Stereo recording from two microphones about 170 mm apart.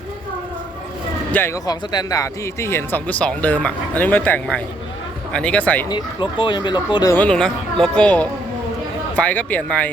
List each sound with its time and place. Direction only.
1.3 s speech: 10° left (ahead or behind)
1.6 s speech: 25° left (ahead or behind)
5.9 s speech: 25° left (ahead or behind)
7.2 s speech: 5° left (ahead or behind)